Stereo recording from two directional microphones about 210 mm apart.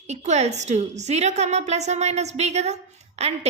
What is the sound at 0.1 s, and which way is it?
A woman's voice, 30° right (ahead or behind).